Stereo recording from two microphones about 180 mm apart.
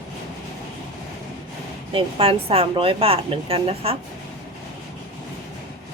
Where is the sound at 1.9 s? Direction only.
30° right (ahead or behind).